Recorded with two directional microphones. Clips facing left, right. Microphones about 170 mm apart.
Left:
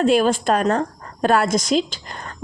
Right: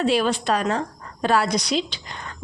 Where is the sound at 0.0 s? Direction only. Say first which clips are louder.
Left 4 dB; 45° left (ahead or behind).